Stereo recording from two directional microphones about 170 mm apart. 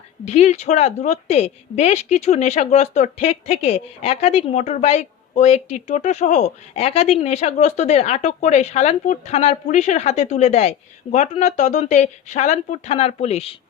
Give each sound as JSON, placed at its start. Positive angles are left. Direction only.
{"t": 0.3, "sound": "speech", "side_deg": 40}